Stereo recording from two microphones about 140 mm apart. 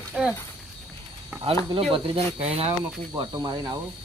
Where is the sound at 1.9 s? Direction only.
40° right (ahead or behind).